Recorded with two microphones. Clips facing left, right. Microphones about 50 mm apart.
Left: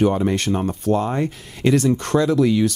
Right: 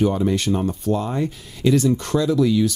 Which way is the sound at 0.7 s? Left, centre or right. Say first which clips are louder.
Left 2 dB; left.